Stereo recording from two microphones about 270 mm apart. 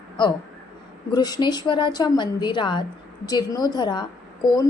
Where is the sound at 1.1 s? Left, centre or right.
Centre.